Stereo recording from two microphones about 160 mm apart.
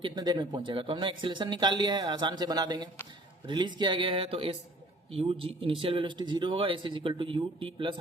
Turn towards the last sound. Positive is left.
turn(degrees=-35)  # may be behind; listen again after turning